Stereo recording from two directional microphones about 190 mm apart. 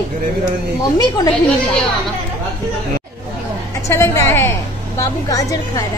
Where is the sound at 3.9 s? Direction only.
15° left (ahead or behind).